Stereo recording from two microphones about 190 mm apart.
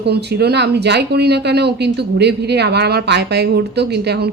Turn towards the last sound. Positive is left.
turn(degrees=-60)  # may be behind; listen again after turning